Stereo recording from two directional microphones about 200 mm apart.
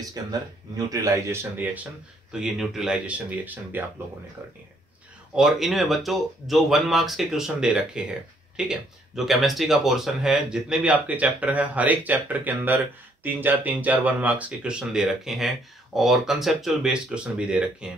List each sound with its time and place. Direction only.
0.0 s speech: 20° right (ahead or behind)